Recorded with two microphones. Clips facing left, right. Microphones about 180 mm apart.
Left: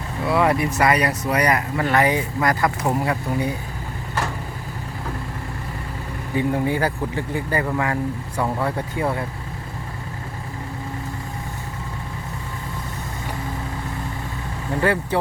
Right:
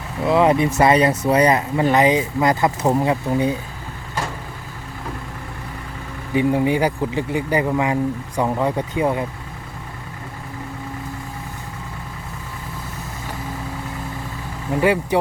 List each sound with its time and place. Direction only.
0.3 s speech: 20° right (ahead or behind)
6.3 s speech: 15° right (ahead or behind)
14.7 s speech: 15° right (ahead or behind)